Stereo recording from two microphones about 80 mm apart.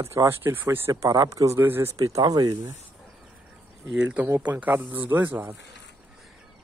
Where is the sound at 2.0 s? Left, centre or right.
Right.